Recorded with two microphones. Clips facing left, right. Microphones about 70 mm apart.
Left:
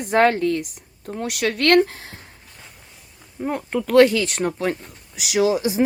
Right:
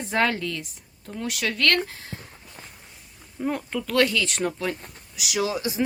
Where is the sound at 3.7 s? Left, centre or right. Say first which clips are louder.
Left 10 dB; left.